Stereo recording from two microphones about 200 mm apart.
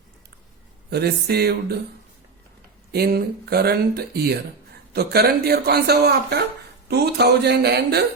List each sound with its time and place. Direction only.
0.9 s speech: 55° right (ahead or behind)
2.9 s speech: 50° right (ahead or behind)